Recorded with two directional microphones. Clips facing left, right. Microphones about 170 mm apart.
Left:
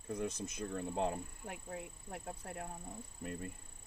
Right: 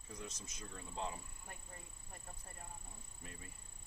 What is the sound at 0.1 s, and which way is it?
Speech, 55° left (ahead or behind).